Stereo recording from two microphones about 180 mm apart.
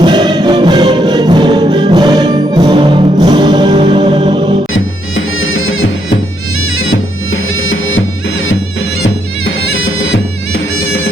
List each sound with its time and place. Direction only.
0.0 s music: 25° right (ahead or behind)
4.7 s music: 90° left
9.8 s bagpipes: 90° left